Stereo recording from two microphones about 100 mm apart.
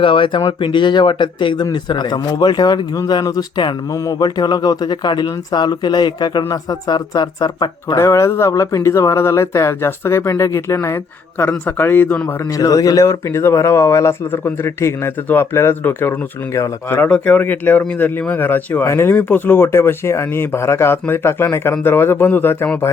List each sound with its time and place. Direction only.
0.0 s speech: 55° left (ahead or behind)
3.9 s speech: 35° left (ahead or behind)
8.0 s speech: 30° left (ahead or behind)
12.5 s speech: 35° left (ahead or behind)